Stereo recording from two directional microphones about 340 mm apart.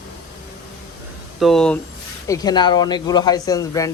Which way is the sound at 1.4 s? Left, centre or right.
Centre.